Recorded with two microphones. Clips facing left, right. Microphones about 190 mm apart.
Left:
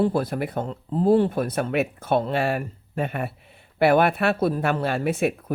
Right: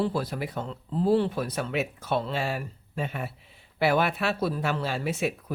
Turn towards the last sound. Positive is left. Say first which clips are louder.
# left 6 dB
turn(degrees=55)  # may be behind; listen again after turning